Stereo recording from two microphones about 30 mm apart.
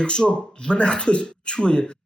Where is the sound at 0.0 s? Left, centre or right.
Left.